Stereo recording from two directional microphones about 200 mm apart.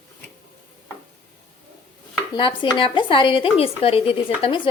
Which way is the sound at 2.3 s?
25° left (ahead or behind).